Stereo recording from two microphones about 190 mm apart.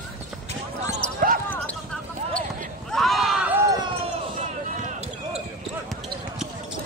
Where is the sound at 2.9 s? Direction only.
Centre (ahead or behind).